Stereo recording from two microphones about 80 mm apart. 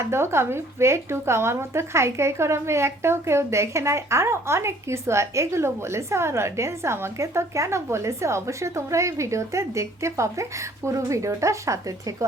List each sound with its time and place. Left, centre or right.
0.0 s a woman's voice: right